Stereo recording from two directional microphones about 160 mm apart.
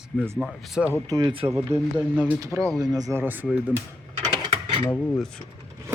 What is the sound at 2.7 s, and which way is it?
Speech, 25° right (ahead or behind).